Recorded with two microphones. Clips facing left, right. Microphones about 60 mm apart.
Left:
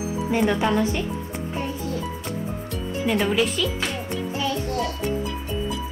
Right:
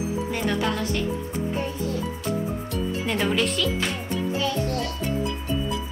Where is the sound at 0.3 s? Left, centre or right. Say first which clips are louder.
Left 7 dB; centre.